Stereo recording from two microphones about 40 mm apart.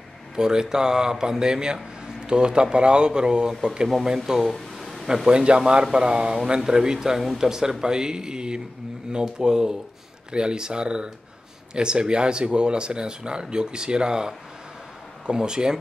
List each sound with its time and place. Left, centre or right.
0.4 s speech: centre
4.7 s a sound: centre
5.0 s speech: centre